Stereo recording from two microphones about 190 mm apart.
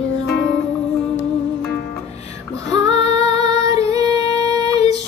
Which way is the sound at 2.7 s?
20° right (ahead or behind).